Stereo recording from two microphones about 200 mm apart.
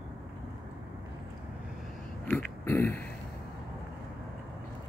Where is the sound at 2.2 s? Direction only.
10° left (ahead or behind).